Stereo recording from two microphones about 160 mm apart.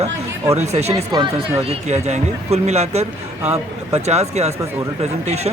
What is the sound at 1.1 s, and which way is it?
Speech, 25° right (ahead or behind).